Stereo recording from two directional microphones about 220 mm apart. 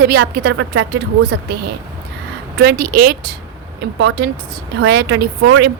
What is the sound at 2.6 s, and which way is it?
A woman's voice, 45° right (ahead or behind).